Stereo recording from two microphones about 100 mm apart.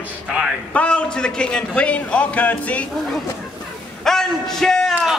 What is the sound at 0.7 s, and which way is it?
A man's voice, 10° left (ahead or behind).